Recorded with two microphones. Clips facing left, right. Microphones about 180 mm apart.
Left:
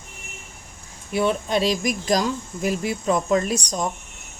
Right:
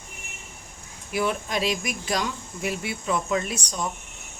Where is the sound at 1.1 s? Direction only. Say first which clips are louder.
Left 5 dB; 25° left (ahead or behind).